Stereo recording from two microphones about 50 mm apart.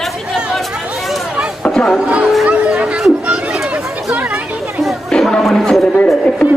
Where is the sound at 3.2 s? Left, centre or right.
Centre.